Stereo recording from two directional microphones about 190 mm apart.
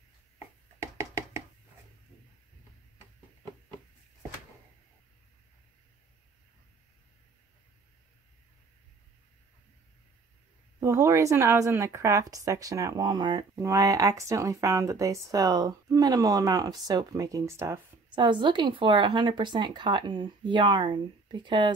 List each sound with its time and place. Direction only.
10.8 s speech: 15° right (ahead or behind)
18.1 s speech: 25° right (ahead or behind)